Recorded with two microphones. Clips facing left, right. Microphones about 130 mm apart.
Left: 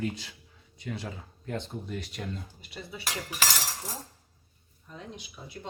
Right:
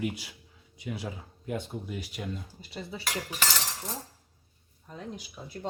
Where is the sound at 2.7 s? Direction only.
30° right (ahead or behind).